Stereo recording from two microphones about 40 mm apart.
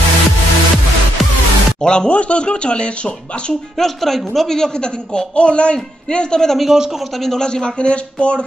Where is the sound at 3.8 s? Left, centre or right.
Centre.